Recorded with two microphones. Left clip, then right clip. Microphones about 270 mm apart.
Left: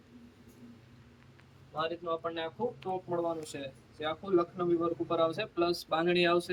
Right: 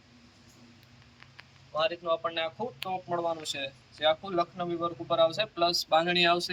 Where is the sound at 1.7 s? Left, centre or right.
Centre.